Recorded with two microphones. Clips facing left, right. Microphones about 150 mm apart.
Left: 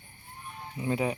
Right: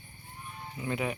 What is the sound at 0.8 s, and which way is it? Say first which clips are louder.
Speech: left 4 dB; 25° left (ahead or behind).